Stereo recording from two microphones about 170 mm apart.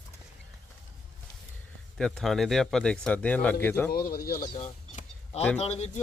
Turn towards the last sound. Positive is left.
turn(degrees=40)  # may be behind; listen again after turning